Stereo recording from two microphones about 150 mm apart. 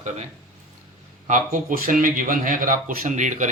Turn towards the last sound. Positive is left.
turn(degrees=-55)  # may be behind; listen again after turning